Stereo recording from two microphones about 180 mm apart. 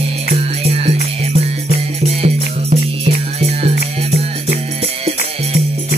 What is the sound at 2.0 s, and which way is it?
Music, 35° right (ahead or behind).